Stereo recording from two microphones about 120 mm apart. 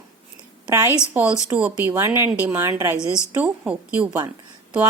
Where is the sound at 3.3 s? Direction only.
10° right (ahead or behind).